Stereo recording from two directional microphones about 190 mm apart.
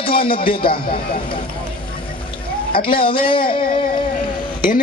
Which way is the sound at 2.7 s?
25° left (ahead or behind).